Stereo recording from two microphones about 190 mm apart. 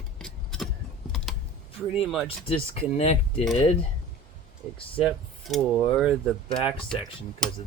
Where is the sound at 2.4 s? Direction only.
30° left (ahead or behind).